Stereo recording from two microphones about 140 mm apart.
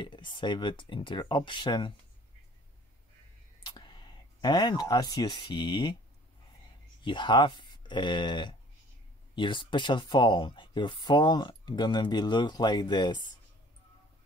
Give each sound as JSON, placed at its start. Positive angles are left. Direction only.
{"t": 0.0, "sound": "speech", "side_deg": 35}
{"t": 3.6, "sound": "speech", "side_deg": 30}
{"t": 7.0, "sound": "speech", "side_deg": 35}